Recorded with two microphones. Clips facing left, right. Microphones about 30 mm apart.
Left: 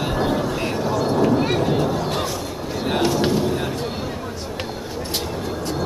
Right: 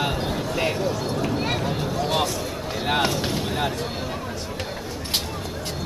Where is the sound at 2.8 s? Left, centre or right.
Centre.